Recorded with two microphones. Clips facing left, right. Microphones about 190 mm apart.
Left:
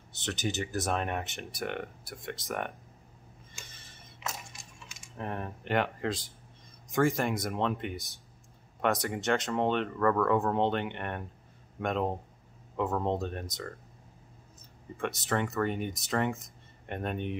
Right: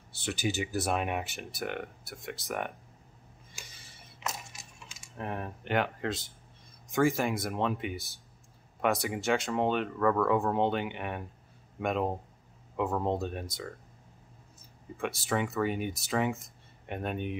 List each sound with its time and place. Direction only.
0.2 s speech: 10° right (ahead or behind)
4.5 s typing: centre (ahead or behind)
6.9 s speech: 5° right (ahead or behind)
15.0 s speech: 5° right (ahead or behind)